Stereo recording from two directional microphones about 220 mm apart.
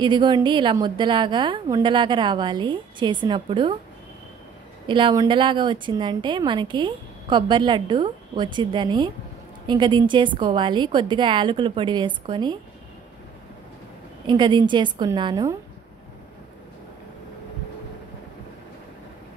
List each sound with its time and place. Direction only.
0.0 s a woman's voice: 20° right (ahead or behind)
4.8 s a woman's voice: 20° right (ahead or behind)
14.2 s a woman's voice: 20° right (ahead or behind)